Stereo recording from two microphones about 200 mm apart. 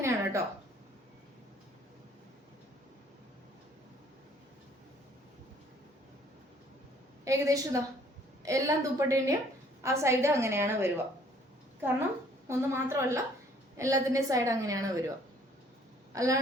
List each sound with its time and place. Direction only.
0.0 s a sound: 15° right (ahead or behind)
7.3 s a woman's voice: 15° right (ahead or behind)
12.5 s a woman's voice: 15° right (ahead or behind)
16.1 s a woman's voice: 15° right (ahead or behind)